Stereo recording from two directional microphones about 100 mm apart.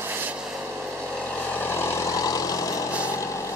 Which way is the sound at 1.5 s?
20° left (ahead or behind).